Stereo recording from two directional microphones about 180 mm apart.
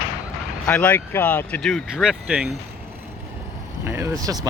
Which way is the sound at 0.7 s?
5° left (ahead or behind).